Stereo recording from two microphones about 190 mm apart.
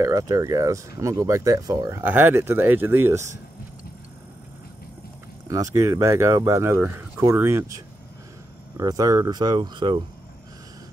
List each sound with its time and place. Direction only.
0.0 s speech: 20° right (ahead or behind)
5.5 s speech: 15° right (ahead or behind)